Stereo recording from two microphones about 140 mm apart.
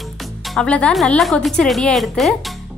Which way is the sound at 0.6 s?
10° left (ahead or behind).